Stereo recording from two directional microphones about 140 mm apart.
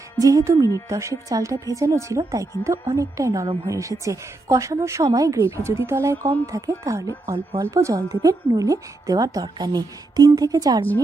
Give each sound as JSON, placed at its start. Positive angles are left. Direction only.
{"t": 0.2, "sound": "a woman's voice", "side_deg": -25}